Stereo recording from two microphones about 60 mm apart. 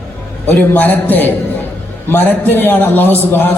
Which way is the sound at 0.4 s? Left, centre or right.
Left.